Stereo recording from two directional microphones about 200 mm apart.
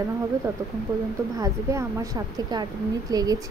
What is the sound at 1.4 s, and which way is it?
A woman's voice, 20° right (ahead or behind).